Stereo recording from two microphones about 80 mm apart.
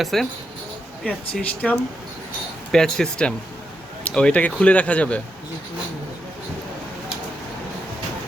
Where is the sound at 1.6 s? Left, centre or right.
Centre.